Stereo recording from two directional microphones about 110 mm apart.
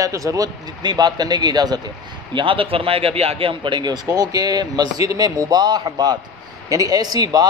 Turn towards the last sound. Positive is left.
turn(degrees=-35)  # may be behind; listen again after turning